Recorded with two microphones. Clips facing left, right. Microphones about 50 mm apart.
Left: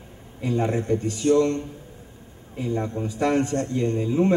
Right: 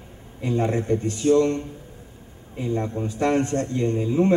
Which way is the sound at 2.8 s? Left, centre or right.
Centre.